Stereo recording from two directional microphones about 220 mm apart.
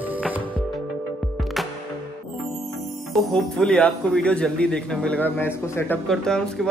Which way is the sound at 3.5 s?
5° left (ahead or behind).